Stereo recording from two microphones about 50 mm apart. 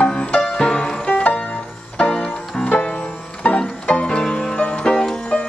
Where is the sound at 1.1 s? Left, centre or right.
Left.